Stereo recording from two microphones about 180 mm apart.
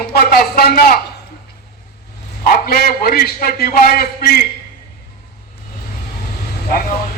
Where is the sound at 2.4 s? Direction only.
55° left (ahead or behind).